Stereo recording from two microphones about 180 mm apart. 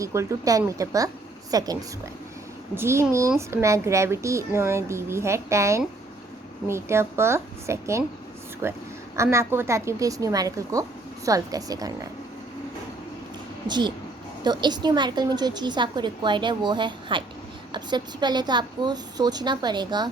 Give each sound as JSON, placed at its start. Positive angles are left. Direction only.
{"t": 0.0, "sound": "a woman's voice", "side_deg": -15}
{"t": 13.7, "sound": "a woman's voice", "side_deg": -25}